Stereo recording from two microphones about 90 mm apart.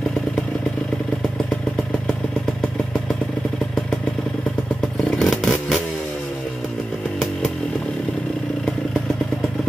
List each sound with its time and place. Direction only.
5.1 s vehicle: 5° left (ahead or behind)